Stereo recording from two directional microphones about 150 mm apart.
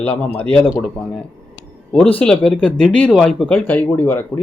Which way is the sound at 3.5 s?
10° left (ahead or behind).